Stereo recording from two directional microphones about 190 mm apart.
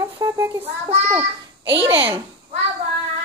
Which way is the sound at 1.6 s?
70° right (ahead or behind).